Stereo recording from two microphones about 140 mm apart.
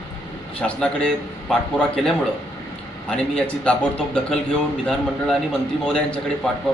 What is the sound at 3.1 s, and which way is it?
A man's voice, 5° left (ahead or behind).